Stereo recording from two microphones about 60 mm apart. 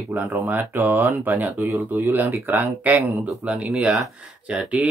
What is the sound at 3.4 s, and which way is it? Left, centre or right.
Speech, centre.